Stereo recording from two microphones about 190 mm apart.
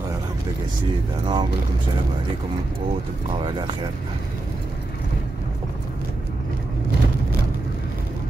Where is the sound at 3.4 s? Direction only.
25° right (ahead or behind).